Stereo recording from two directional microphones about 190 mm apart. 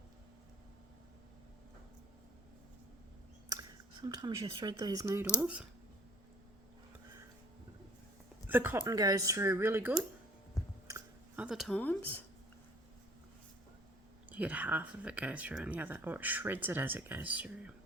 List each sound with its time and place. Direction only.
3.5 s speech: 20° right (ahead or behind)
5.4 s speech: 5° right (ahead or behind)
8.4 s speech: 10° right (ahead or behind)
10.8 s chewing: 15° right (ahead or behind)
11.4 s speech: centre (ahead or behind)
14.3 s speech: 10° right (ahead or behind)